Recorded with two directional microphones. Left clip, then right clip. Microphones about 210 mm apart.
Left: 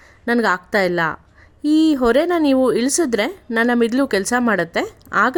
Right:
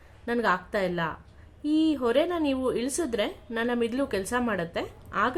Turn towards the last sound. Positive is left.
turn(degrees=45)  # may be behind; listen again after turning